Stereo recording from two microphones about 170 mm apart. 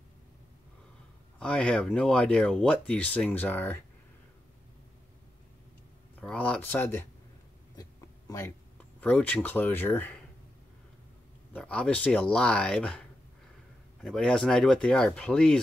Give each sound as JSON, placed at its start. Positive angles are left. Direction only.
{"t": 1.4, "sound": "speech", "side_deg": 5}
{"t": 6.2, "sound": "speech", "side_deg": 5}
{"t": 8.3, "sound": "speech", "side_deg": 15}
{"t": 11.5, "sound": "speech", "side_deg": 5}
{"t": 14.0, "sound": "speech", "side_deg": 5}